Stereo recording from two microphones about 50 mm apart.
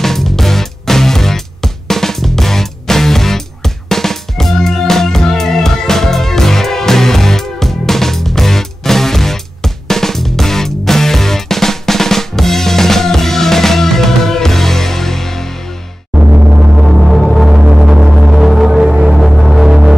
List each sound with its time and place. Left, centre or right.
0.0 s music: centre
16.2 s music: right
16.7 s music: centre
19.1 s a sound: centre